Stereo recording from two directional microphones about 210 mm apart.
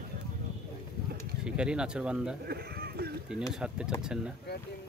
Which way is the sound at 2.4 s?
45° right (ahead or behind).